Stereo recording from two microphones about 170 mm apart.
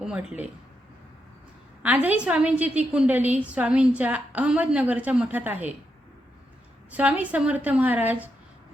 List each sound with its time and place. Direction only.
0.0 s speech: 5° right (ahead or behind)
1.8 s a woman's voice: 10° right (ahead or behind)
6.9 s a woman's voice: 10° right (ahead or behind)